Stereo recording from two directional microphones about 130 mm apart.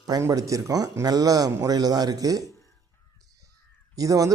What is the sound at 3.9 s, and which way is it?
Speech, 25° right (ahead or behind).